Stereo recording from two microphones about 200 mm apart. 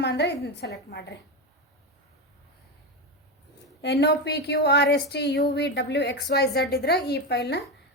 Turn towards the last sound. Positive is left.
turn(degrees=60)  # may be behind; listen again after turning